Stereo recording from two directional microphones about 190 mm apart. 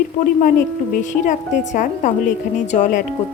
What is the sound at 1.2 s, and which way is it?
A woman's voice, 40° left (ahead or behind).